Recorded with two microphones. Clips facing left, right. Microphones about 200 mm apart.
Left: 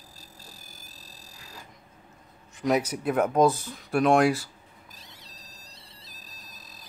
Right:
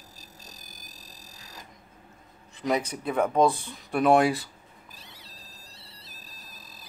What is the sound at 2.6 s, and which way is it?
Speech, 5° left (ahead or behind).